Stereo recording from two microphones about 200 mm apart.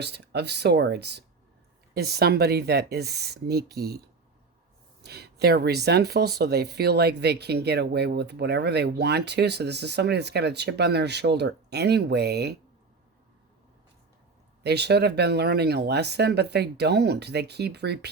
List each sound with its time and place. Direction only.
0.0 s speech: 55° right (ahead or behind)
5.0 s speech: 55° right (ahead or behind)
14.6 s speech: 55° right (ahead or behind)